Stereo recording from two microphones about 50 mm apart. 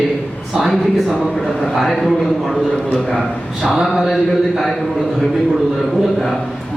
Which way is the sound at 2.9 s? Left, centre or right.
Centre.